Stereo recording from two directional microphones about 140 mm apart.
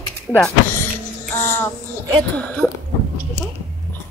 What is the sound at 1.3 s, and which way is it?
Child singing, 15° left (ahead or behind).